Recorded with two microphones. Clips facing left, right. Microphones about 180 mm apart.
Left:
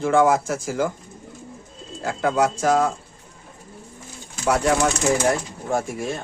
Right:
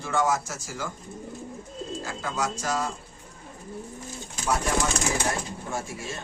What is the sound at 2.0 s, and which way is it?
Speech, 60° left (ahead or behind).